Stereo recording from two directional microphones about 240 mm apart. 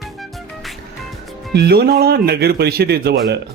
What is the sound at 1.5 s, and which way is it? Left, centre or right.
Speech, right.